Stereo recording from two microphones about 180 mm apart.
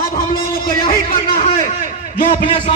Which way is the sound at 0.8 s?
50° left (ahead or behind).